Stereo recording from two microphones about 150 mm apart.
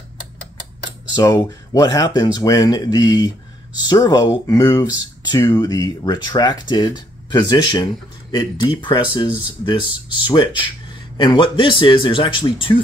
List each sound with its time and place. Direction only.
1.1 s speech: 25° left (ahead or behind)